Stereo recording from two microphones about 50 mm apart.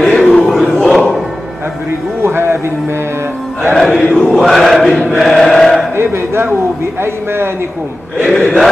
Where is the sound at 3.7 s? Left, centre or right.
Centre.